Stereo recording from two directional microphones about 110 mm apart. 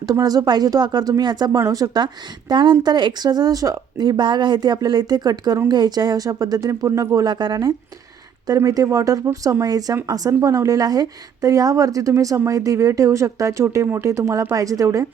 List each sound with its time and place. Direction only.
0.1 s speech: 35° right (ahead or behind)